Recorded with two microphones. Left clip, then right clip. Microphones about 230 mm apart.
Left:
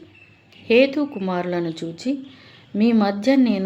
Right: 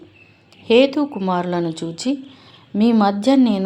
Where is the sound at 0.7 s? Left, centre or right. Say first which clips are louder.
Right 2 dB; centre.